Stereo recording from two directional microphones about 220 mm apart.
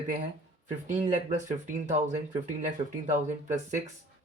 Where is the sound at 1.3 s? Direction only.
35° right (ahead or behind).